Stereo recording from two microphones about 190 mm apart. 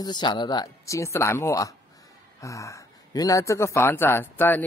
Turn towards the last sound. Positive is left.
turn(degrees=10)  # may be behind; listen again after turning